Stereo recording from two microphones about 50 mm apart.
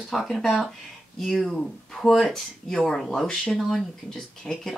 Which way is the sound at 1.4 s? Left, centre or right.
Centre.